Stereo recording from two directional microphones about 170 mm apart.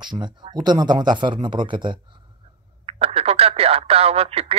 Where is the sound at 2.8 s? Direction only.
35° right (ahead or behind).